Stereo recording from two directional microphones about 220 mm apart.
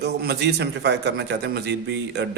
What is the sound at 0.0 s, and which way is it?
Speech, 50° right (ahead or behind).